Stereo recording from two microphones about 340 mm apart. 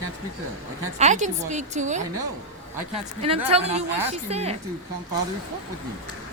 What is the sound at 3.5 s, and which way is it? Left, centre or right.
Speech, centre.